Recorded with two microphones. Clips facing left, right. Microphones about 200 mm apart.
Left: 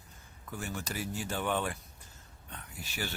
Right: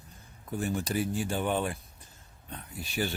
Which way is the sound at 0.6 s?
35° right (ahead or behind).